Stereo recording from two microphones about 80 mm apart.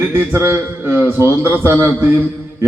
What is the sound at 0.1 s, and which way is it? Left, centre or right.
A man's voice, right.